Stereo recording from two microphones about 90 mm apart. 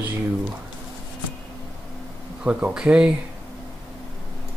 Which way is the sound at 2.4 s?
10° right (ahead or behind).